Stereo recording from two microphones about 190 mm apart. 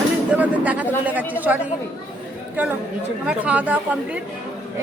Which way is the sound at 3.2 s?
5° right (ahead or behind).